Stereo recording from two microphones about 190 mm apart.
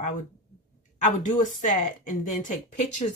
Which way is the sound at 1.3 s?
40° left (ahead or behind).